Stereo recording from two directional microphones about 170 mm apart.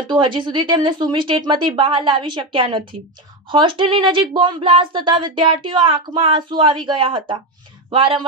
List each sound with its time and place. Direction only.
0.1 s speech: 30° right (ahead or behind)